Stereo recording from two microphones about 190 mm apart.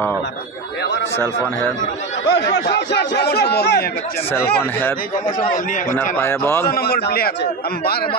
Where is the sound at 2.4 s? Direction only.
65° left (ahead or behind).